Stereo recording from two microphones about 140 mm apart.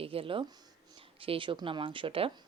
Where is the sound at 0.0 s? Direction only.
40° right (ahead or behind).